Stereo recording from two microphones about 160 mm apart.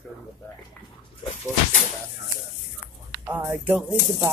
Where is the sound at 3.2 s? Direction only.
10° right (ahead or behind).